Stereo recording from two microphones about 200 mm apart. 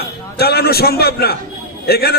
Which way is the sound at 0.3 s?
50° left (ahead or behind).